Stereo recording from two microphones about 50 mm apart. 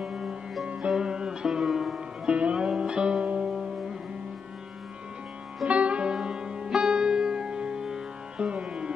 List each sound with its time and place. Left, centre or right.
0.0 s music: centre
0.7 s music: centre
2.2 s music: centre
5.7 s music: right
6.1 s music: centre